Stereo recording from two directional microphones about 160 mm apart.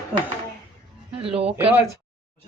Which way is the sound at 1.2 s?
35° right (ahead or behind).